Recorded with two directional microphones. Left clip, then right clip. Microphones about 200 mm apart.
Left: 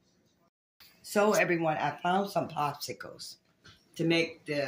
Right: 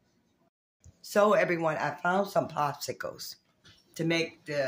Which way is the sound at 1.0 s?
20° right (ahead or behind).